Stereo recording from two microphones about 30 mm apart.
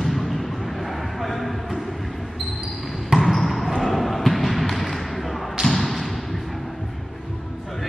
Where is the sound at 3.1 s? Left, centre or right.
Right.